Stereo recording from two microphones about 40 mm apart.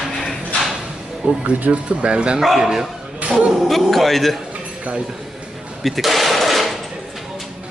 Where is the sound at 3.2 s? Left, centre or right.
Right.